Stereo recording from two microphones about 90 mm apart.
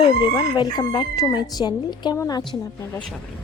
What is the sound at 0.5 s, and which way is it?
Chicken, 55° left (ahead or behind).